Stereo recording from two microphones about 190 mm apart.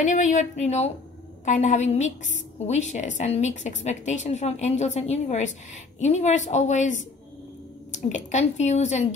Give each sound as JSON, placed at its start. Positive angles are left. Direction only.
{"t": 0.0, "sound": "a woman's voice", "side_deg": 40}